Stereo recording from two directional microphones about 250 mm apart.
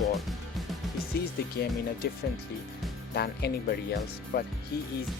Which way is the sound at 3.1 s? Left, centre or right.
Left.